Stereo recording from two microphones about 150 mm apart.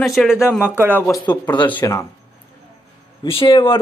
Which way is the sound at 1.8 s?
20° left (ahead or behind).